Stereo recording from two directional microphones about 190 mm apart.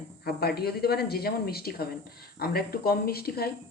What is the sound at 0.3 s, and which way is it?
Speech, 55° left (ahead or behind).